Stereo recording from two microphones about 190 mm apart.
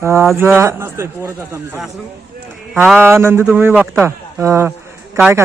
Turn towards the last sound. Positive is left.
turn(degrees=-15)  # may be behind; listen again after turning